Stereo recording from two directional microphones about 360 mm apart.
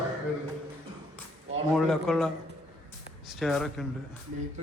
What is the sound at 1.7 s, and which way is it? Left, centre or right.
A man's voice, centre.